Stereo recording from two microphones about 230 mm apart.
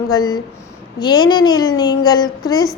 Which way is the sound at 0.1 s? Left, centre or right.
Centre.